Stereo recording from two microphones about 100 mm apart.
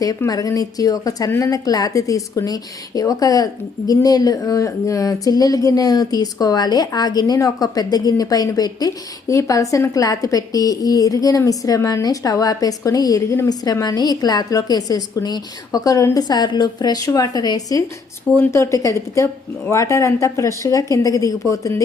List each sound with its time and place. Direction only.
0.3 s a woman's voice: 35° left (ahead or behind)
18.3 s a woman's voice: 25° left (ahead or behind)